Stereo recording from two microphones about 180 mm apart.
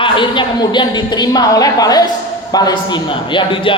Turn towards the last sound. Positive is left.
turn(degrees=30)  # may be behind; listen again after turning